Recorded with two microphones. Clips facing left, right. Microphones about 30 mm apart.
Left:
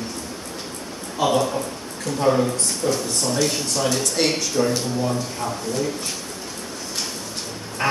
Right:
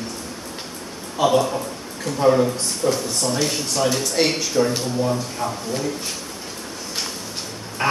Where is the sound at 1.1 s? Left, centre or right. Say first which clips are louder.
Right 2 dB; centre.